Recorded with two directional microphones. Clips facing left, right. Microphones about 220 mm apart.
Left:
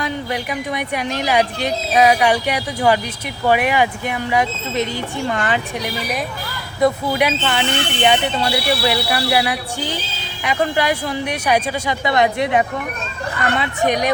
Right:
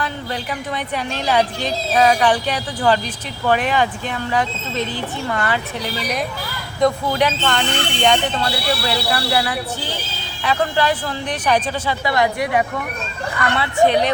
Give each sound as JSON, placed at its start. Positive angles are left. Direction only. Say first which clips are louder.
{"t": 0.0, "sound": "speech", "louder": "left 3 dB", "side_deg": 15}